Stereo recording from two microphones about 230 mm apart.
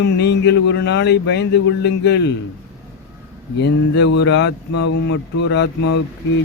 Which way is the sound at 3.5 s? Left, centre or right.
Left.